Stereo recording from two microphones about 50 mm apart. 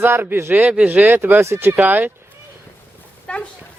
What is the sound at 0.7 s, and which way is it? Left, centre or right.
Speech, right.